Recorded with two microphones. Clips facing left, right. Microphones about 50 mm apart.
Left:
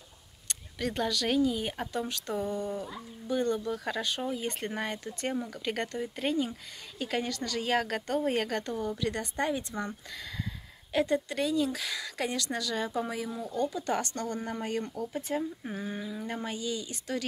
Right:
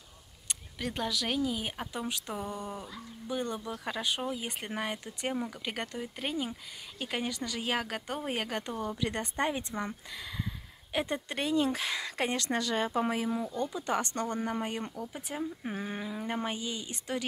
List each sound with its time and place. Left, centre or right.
0.5 s a woman's voice: centre; by 2.8 s right
3.3 s a woman's voice: centre
15.6 s speech: right